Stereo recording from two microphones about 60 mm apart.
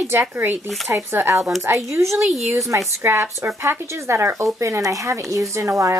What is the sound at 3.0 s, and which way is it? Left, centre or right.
Speech, right.